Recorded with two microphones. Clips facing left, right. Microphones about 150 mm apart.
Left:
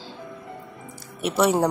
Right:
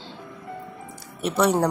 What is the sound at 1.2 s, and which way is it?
Speech, 5° left (ahead or behind).